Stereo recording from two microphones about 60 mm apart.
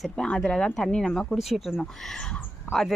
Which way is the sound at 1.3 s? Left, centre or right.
Centre.